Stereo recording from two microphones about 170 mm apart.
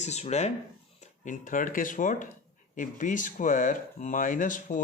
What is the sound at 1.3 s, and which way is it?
Speech, 50° left (ahead or behind).